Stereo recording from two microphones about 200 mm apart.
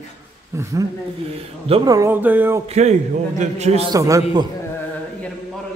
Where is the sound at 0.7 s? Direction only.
15° right (ahead or behind).